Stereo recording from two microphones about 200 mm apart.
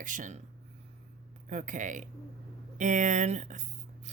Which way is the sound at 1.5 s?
40° right (ahead or behind).